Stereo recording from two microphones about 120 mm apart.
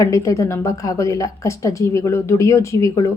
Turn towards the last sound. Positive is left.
turn(degrees=25)  # may be behind; listen again after turning